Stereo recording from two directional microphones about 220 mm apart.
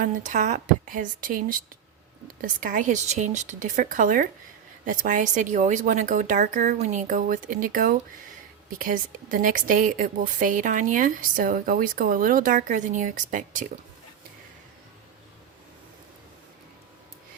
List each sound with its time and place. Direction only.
0.0 s a woman's voice: 35° right (ahead or behind)